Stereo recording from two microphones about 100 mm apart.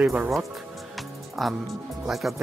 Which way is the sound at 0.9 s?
Centre (ahead or behind).